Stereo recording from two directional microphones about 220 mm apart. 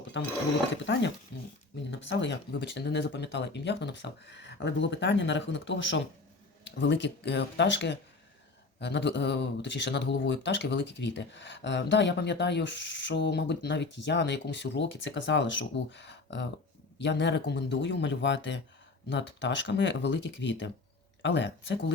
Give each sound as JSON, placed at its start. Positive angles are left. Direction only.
{"t": 1.3, "sound": "speech", "side_deg": 55}